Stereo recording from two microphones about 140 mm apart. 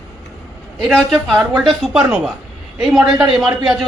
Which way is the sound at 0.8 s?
5° left (ahead or behind).